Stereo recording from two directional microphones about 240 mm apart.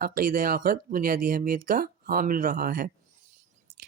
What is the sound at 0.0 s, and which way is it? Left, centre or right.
Speech, right.